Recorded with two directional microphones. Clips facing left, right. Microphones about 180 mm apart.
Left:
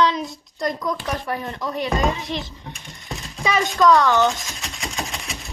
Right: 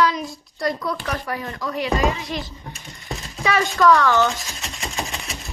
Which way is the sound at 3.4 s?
20° left (ahead or behind).